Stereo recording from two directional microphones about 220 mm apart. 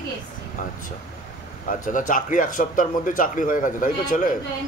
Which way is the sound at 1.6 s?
35° left (ahead or behind).